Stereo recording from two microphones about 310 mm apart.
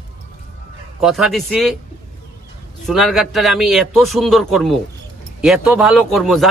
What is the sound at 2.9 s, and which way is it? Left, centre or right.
A man's voice, centre.